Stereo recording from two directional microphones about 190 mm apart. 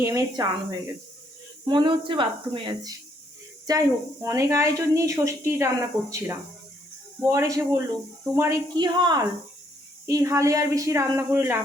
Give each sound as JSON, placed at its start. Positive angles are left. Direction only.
{"t": 0.0, "sound": "a woman's voice", "side_deg": -15}